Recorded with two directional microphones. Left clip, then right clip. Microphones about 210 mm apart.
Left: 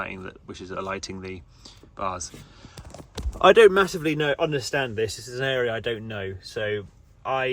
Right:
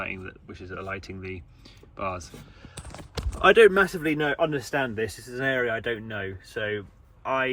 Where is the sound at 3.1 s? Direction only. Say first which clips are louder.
Left 3 dB; 45° left (ahead or behind).